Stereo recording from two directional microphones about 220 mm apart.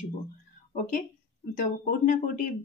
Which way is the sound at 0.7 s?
35° left (ahead or behind).